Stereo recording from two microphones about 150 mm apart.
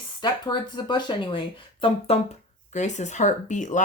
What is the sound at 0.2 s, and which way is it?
Speech, 30° left (ahead or behind).